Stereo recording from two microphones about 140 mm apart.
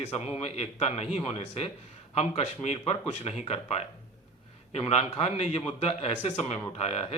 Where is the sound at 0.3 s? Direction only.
50° left (ahead or behind).